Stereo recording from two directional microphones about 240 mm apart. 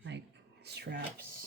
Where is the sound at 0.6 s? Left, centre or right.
Right.